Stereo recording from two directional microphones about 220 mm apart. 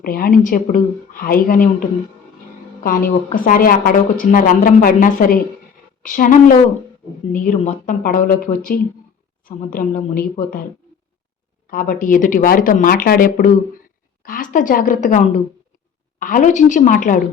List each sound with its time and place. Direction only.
0.0 s a woman's voice: 40° left (ahead or behind)
11.7 s a woman's voice: 40° left (ahead or behind)